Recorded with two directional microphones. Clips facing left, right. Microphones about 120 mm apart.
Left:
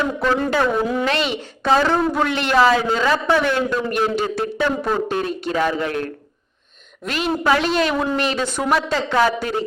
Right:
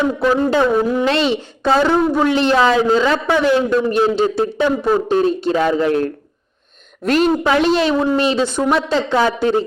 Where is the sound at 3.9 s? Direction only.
25° right (ahead or behind).